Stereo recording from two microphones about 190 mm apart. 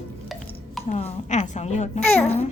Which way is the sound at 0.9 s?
40° left (ahead or behind).